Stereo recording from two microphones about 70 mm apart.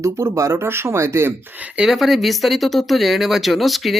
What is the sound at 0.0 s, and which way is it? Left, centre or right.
Speech, right.